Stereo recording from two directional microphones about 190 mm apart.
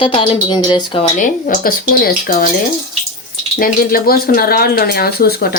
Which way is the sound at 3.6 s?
50° left (ahead or behind).